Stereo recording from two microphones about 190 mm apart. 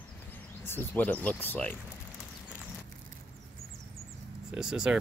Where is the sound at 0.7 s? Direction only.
10° left (ahead or behind).